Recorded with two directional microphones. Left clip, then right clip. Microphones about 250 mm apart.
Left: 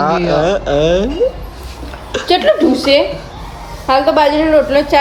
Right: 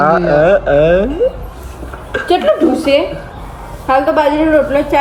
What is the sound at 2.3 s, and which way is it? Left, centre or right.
A woman's voice, left.